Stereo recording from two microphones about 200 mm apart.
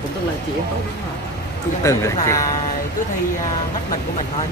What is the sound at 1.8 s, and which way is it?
Speech, 15° left (ahead or behind).